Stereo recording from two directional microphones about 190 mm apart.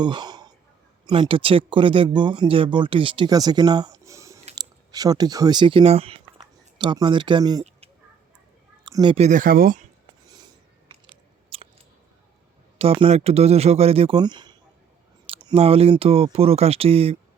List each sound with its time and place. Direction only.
0.0 s a sound: 25° right (ahead or behind)
1.0 s speech: 25° right (ahead or behind)
8.8 s speech: 25° right (ahead or behind); by 9.8 s 50° right (ahead or behind)
10.2 s biting: 20° right (ahead or behind)
12.8 s speech: 30° right (ahead or behind)